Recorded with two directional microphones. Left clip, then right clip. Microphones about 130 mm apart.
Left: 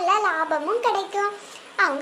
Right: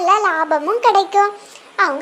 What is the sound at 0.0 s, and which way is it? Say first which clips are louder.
Speech: right 6 dB; 35° right (ahead or behind).